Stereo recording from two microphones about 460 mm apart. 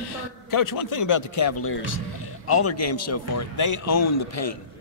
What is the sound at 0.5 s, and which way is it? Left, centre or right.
A man's voice, left.